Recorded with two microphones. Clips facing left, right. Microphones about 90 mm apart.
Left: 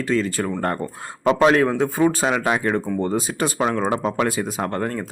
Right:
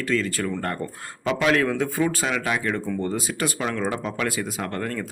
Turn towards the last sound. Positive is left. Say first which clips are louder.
# left 4 dB
turn(degrees=25)  # may be behind; listen again after turning